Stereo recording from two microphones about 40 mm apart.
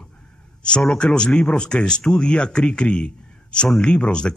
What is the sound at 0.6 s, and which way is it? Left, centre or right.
Speech, left.